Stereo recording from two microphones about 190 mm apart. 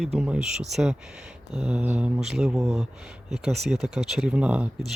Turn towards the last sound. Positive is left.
turn(degrees=-5)  # may be behind; listen again after turning